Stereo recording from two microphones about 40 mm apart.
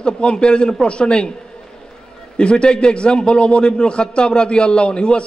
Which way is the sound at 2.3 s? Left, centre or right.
Left.